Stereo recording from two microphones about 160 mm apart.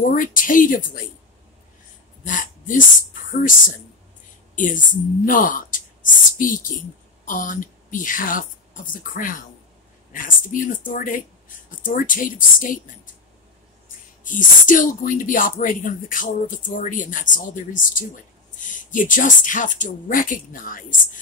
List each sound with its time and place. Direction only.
0.1 s speech: 55° left (ahead or behind)
2.2 s speech: 55° left (ahead or behind)
5.2 s speech: 60° left (ahead or behind)
14.2 s speech: 55° left (ahead or behind)